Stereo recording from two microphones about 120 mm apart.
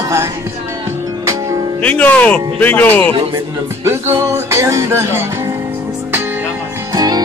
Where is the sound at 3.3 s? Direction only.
25° right (ahead or behind).